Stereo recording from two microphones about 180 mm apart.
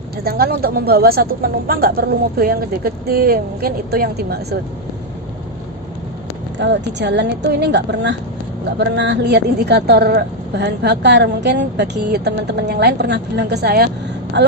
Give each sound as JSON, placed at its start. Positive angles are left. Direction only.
{"t": 0.3, "sound": "speech", "side_deg": -55}
{"t": 6.6, "sound": "speech", "side_deg": -75}
{"t": 14.3, "sound": "speech", "side_deg": -80}